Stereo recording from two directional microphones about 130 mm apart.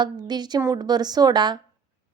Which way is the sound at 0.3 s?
35° right (ahead or behind).